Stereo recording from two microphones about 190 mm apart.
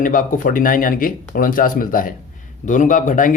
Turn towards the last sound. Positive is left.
turn(degrees=45)  # may be behind; listen again after turning